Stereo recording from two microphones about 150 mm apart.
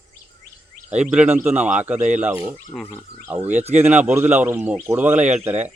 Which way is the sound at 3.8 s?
10° right (ahead or behind).